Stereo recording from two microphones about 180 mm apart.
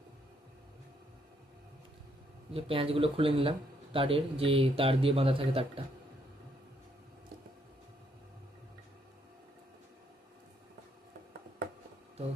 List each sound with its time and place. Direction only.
2.5 s a man's voice: 30° right (ahead or behind)